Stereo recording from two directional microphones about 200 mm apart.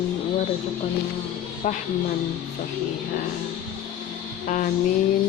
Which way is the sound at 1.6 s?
40° left (ahead or behind).